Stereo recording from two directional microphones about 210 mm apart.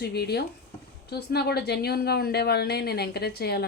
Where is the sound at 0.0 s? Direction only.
50° left (ahead or behind).